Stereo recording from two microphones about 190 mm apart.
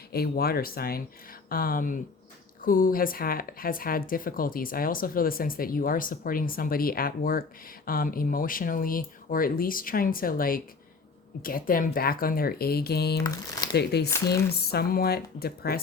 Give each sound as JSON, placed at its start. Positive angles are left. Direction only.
{"t": 0.1, "sound": "speech", "side_deg": 55}